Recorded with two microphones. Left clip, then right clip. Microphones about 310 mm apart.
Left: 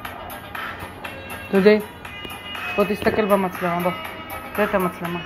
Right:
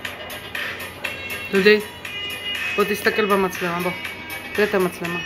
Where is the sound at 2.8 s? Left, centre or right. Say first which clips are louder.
Even; centre.